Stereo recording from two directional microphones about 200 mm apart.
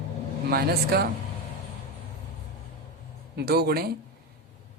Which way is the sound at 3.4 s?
50° right (ahead or behind).